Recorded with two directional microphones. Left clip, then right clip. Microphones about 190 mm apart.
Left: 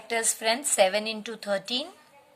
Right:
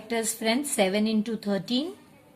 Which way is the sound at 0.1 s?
35° left (ahead or behind).